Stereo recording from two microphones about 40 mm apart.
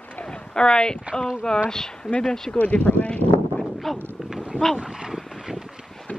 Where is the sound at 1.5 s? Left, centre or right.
Centre.